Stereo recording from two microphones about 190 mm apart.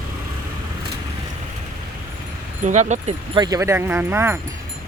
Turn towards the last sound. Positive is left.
turn(degrees=-15)  # may be behind; listen again after turning